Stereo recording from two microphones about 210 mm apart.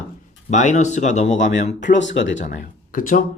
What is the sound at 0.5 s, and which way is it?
Speech, 35° left (ahead or behind).